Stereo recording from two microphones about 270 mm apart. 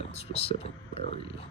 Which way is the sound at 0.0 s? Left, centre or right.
Left.